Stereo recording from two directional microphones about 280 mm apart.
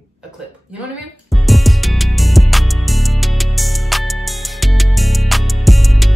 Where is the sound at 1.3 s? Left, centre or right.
Centre.